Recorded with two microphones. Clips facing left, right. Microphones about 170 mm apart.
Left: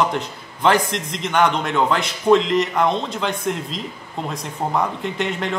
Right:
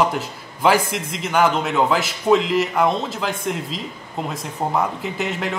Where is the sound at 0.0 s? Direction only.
5° right (ahead or behind).